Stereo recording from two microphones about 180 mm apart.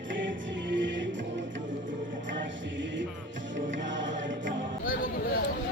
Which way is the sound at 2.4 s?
90° right.